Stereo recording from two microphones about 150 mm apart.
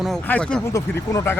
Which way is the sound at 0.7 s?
20° left (ahead or behind).